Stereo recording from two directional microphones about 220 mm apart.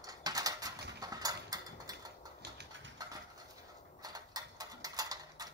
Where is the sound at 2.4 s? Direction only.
55° right (ahead or behind).